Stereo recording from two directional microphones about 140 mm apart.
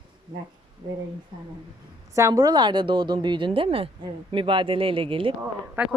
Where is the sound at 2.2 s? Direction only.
25° right (ahead or behind); by 5.3 s 40° right (ahead or behind).